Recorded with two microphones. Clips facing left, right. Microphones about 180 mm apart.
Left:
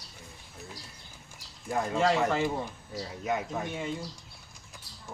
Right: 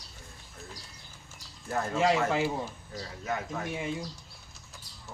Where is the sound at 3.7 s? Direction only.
10° right (ahead or behind).